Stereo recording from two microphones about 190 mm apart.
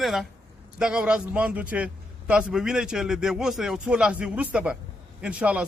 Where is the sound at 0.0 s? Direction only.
Centre (ahead or behind).